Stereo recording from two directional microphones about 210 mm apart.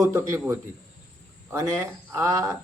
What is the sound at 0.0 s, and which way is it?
Speech, 15° right (ahead or behind).